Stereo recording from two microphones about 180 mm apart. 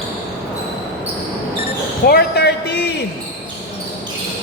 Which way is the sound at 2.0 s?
60° left (ahead or behind).